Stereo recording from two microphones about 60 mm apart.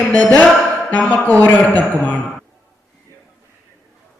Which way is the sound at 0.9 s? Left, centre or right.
Left.